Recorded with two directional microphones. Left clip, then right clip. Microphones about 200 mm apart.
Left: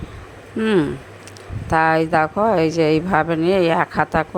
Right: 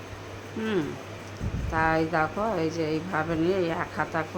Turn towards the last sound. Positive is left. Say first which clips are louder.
# left 11 dB
turn(degrees=40)  # may be behind; listen again after turning